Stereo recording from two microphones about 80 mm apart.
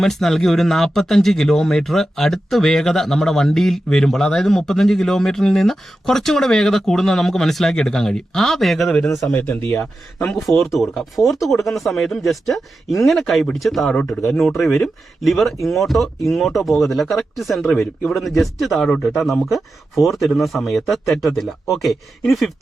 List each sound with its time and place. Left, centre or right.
0.0 s speech: centre
9.3 s speech: left
10.3 s speech: centre